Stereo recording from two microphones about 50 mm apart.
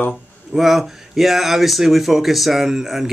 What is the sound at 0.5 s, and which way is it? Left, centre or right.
Speech, centre.